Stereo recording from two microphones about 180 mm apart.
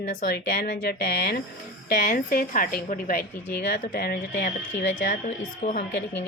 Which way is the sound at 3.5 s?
65° left (ahead or behind).